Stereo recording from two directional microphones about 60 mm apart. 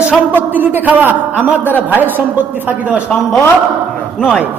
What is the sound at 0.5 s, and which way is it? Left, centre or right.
A woman's voice, right.